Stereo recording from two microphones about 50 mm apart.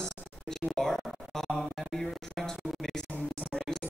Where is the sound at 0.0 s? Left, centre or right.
Centre.